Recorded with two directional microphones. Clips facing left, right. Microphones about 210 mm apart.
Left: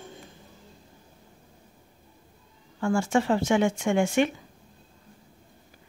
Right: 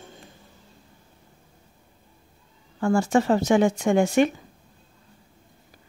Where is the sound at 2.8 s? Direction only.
35° right (ahead or behind).